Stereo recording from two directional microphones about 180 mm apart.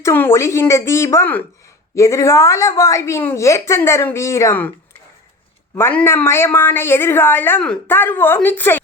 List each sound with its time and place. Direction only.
0.0 s a woman's voice: 15° left (ahead or behind)
5.7 s a woman's voice: 10° left (ahead or behind)